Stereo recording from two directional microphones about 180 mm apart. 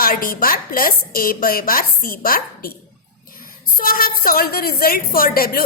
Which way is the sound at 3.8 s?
55° left (ahead or behind).